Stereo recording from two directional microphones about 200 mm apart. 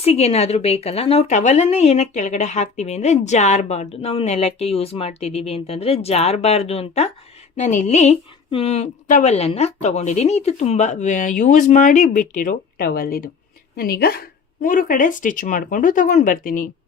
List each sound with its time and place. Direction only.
0.0 s speech: 30° left (ahead or behind)